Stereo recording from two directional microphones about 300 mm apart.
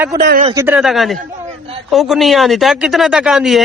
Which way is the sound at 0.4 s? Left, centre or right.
Centre.